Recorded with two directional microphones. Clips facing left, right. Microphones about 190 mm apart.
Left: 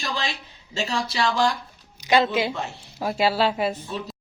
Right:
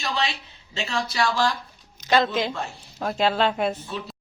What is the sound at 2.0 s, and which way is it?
Speech, 10° left (ahead or behind).